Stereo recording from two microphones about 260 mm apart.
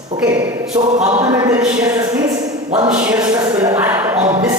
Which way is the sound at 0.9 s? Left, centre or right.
Right.